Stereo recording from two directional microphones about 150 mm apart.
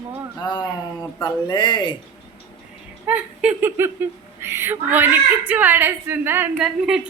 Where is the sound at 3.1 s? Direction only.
10° right (ahead or behind).